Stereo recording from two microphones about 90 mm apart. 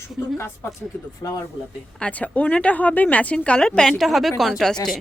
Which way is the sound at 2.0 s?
15° left (ahead or behind).